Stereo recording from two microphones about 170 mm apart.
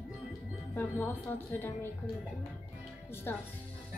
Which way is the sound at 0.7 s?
10° left (ahead or behind).